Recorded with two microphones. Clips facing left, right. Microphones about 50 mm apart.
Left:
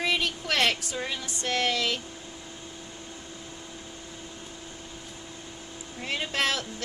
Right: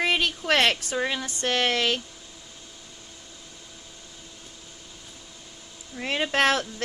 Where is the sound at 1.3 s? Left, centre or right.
Right.